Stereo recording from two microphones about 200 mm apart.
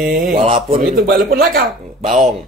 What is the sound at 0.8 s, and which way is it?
Speech, 45° right (ahead or behind).